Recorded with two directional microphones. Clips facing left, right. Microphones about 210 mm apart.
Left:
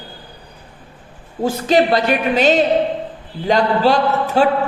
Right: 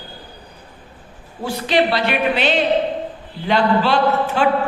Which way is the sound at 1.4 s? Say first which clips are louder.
Left 3 dB; 45° left (ahead or behind).